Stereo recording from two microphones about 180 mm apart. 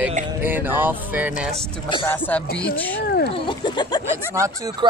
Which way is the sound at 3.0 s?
65° left (ahead or behind).